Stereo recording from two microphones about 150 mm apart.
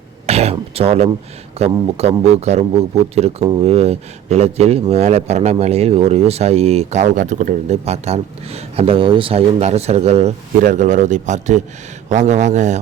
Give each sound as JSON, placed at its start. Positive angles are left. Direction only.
{"t": 0.3, "sound": "throat clearing", "side_deg": -45}
{"t": 0.5, "sound": "a man's voice", "side_deg": -40}
{"t": 10.6, "sound": "a man's voice", "side_deg": -60}